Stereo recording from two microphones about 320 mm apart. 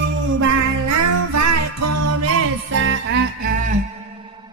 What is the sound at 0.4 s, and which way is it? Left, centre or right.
Music, right.